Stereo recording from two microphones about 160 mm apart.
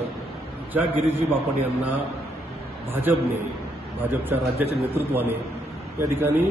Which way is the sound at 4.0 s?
15° right (ahead or behind).